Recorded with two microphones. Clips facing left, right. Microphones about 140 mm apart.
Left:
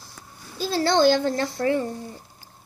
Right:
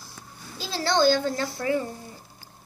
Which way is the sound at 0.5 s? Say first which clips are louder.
Left 6 dB; 50° left (ahead or behind).